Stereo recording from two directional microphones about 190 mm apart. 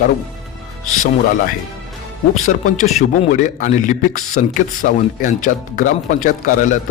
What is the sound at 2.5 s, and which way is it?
A man's voice, 35° left (ahead or behind).